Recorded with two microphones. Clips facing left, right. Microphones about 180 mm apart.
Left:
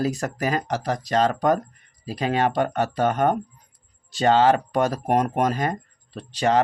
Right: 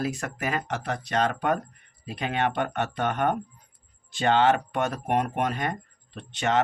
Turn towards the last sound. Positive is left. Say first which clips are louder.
# left 5 dB
turn(degrees=35)  # may be behind; listen again after turning